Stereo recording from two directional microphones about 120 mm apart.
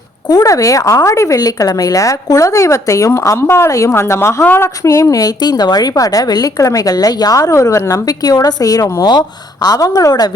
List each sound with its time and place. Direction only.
0.3 s a woman's voice: 30° left (ahead or behind)